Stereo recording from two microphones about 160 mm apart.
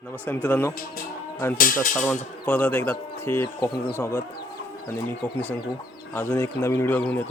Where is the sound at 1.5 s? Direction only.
60° left (ahead or behind).